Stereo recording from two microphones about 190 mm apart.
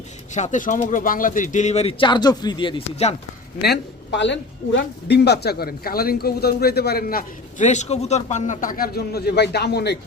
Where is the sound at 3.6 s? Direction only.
65° left (ahead or behind).